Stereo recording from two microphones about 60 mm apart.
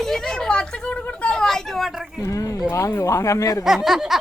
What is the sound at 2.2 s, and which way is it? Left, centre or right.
Speech, left.